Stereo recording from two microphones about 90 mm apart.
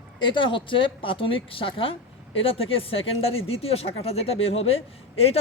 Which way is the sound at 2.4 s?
90° left.